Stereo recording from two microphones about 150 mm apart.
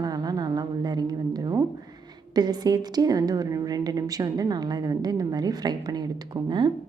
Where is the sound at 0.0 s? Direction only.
25° right (ahead or behind).